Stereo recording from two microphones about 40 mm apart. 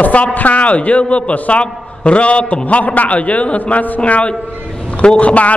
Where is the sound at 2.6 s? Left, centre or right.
Left.